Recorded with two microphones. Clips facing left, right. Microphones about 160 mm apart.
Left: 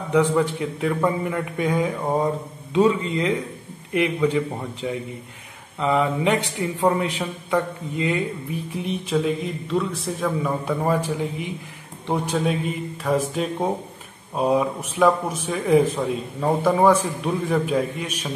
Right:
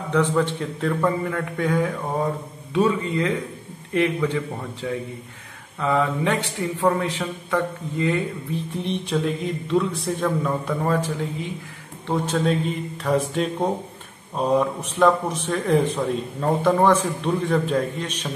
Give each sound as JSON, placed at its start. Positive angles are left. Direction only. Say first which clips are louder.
{"t": 0.1, "sound": "speech", "louder": "left 2 dB", "side_deg": 10}
{"t": 8.7, "sound": "a man's voice", "louder": "left 2 dB", "side_deg": 5}